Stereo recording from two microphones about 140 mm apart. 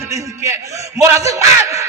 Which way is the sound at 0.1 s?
20° right (ahead or behind).